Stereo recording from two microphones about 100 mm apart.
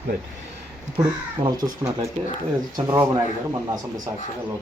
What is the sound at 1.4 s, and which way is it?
Speech, 45° right (ahead or behind).